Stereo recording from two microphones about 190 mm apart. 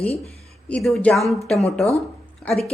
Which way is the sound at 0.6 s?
5° left (ahead or behind).